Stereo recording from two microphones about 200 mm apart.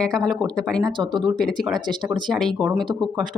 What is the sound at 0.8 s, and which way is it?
Speech, 20° right (ahead or behind).